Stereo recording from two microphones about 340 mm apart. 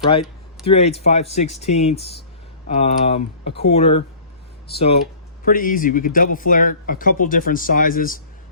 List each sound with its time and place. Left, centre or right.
0.1 s speech: centre
5.5 s speech: left